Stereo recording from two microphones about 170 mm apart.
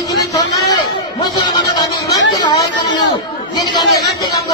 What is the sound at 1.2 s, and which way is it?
Music, 25° left (ahead or behind).